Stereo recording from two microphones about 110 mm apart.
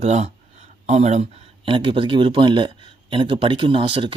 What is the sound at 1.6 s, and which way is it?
Speech, 50° right (ahead or behind).